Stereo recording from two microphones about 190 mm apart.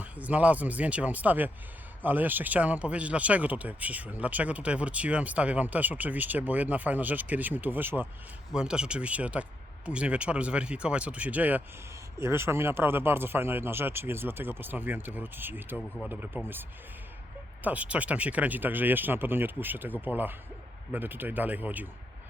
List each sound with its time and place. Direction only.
0.0 s speech: 10° right (ahead or behind)
17.6 s speech: 5° right (ahead or behind)